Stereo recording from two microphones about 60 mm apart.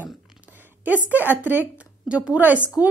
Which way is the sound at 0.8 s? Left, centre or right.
Right.